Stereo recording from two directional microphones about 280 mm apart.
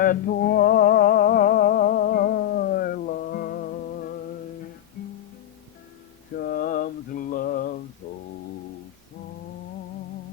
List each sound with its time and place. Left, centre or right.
0.0 s music: left
6.4 s mantra: left
8.0 s music: left